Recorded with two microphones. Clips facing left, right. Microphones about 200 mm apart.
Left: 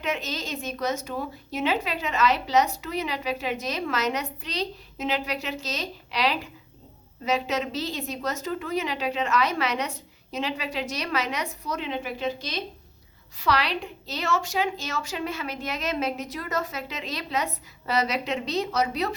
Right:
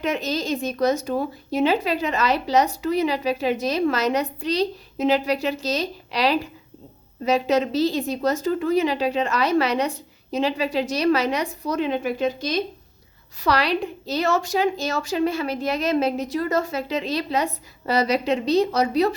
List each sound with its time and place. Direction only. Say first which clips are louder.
0.0 s a woman's voice: right 6 dB; 35° right (ahead or behind)